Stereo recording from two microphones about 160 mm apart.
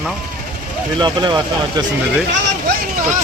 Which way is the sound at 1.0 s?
25° right (ahead or behind).